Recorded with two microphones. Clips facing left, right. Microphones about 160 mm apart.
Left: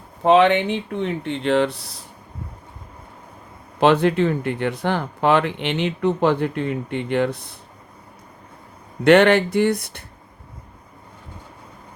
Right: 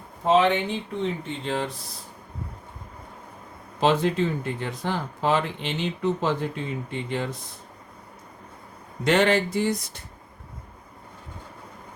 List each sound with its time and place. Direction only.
0.2 s speech: 70° left (ahead or behind)
3.8 s speech: 65° left (ahead or behind)
9.0 s speech: 65° left (ahead or behind)